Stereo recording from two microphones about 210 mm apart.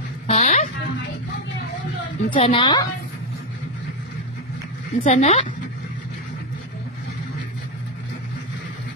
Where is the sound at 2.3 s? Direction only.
25° left (ahead or behind).